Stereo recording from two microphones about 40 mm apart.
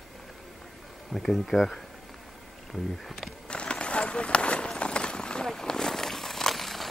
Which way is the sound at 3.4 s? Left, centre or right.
Left.